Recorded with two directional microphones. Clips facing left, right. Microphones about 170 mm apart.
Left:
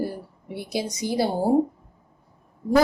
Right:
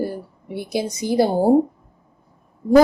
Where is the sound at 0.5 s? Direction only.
55° right (ahead or behind).